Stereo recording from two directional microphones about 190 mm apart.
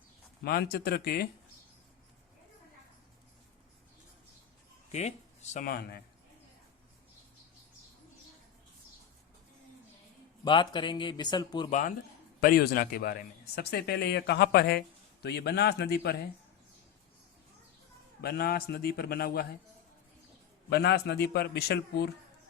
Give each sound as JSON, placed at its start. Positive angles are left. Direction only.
{"t": 0.4, "sound": "speech", "side_deg": 55}
{"t": 4.9, "sound": "speech", "side_deg": 35}
{"t": 5.6, "sound": "speech", "side_deg": 50}
{"t": 10.4, "sound": "speech", "side_deg": 25}
{"t": 11.7, "sound": "speech", "side_deg": 45}
{"t": 18.2, "sound": "speech", "side_deg": 55}
{"t": 20.7, "sound": "speech", "side_deg": 60}